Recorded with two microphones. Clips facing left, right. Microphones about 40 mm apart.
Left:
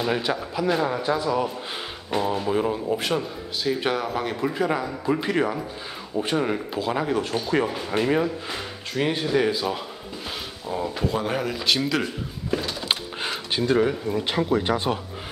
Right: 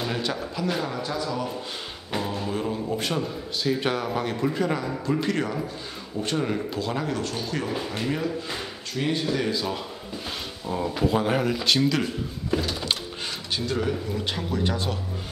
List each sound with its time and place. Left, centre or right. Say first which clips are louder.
0.0 s a man's voice: left 4 dB; centre
10.7 s a man's voice: right 2 dB; centre
12.8 s a sound: left 2 dB; left
13.7 s speech: left 6 dB; left